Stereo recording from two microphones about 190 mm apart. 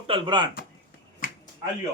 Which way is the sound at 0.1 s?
25° right (ahead or behind).